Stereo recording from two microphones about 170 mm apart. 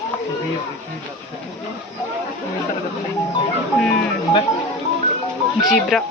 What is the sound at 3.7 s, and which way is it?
Speech, 5° left (ahead or behind).